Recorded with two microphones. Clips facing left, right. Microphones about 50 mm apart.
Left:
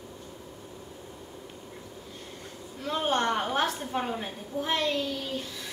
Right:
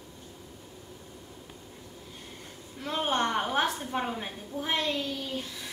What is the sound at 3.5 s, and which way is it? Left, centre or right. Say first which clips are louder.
A woman's voice: even; centre.